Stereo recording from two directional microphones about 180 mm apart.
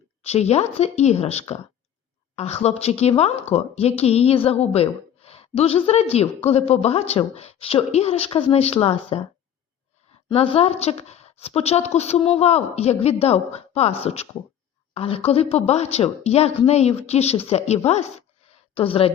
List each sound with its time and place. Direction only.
0.2 s a woman's voice: 35° left (ahead or behind)
10.2 s a woman's voice: 30° left (ahead or behind)